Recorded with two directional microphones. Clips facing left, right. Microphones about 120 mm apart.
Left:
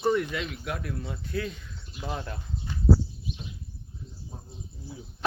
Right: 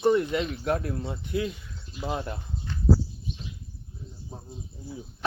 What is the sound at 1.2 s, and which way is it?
Speech, 15° right (ahead or behind).